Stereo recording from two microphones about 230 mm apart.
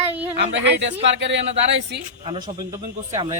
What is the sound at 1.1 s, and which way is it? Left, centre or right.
Speech, right.